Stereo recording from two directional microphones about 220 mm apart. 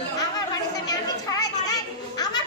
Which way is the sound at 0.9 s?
15° left (ahead or behind).